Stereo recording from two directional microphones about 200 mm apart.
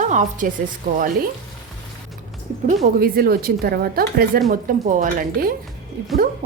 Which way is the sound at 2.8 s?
45° right (ahead or behind).